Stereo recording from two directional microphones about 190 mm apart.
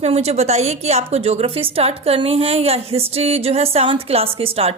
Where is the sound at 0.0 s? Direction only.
35° right (ahead or behind).